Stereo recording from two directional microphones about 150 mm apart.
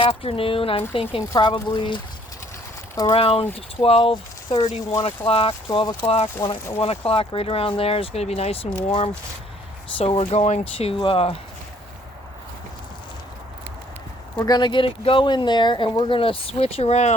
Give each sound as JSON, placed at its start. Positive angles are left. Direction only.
{"t": 0.0, "sound": "speech", "side_deg": 40}
{"t": 3.2, "sound": "speech", "side_deg": 40}
{"t": 4.1, "sound": "speech", "side_deg": 25}
{"t": 5.0, "sound": "speech", "side_deg": 40}
{"t": 14.3, "sound": "speech", "side_deg": 25}